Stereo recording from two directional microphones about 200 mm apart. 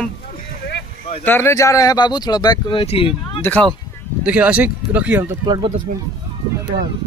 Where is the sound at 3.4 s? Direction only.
5° left (ahead or behind).